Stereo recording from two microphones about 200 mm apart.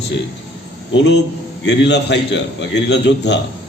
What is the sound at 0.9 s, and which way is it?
A man's voice, 60° left (ahead or behind).